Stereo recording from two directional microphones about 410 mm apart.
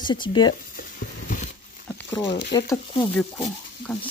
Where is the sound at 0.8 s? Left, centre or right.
Centre.